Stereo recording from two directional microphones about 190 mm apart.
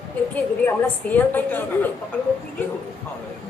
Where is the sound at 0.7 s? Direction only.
10° left (ahead or behind).